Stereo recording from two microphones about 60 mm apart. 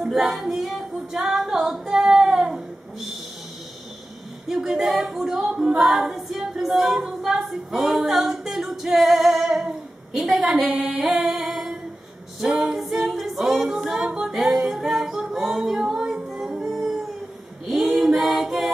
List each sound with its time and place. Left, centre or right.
0.0 s female singing: centre
4.5 s female singing: centre
12.4 s a capella: centre
16.3 s singing: centre
17.6 s a capella: centre